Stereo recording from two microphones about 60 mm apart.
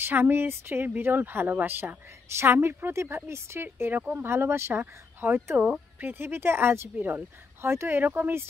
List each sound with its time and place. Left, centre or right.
0.0 s a woman's voice: right
5.6 s speech: right
6.0 s speech: right
8.0 s speech: right